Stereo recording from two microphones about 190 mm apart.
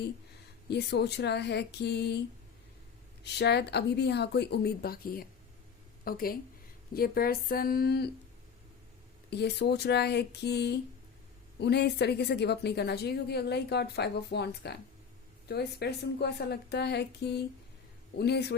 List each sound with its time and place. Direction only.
0.7 s a woman's voice: 60° left (ahead or behind)
3.2 s a woman's voice: 60° left (ahead or behind)
9.3 s a woman's voice: 60° left (ahead or behind)